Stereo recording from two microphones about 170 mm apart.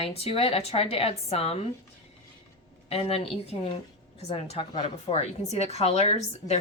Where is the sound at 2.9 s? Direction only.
35° left (ahead or behind).